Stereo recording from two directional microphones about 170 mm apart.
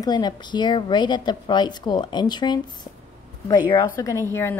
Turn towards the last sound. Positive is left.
turn(degrees=15)  # may be behind; listen again after turning